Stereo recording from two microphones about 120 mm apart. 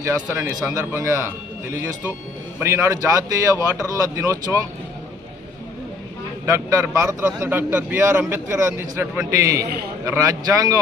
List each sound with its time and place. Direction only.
0.0 s a man's voice: 20° right (ahead or behind)
6.4 s a man's voice: 20° right (ahead or behind)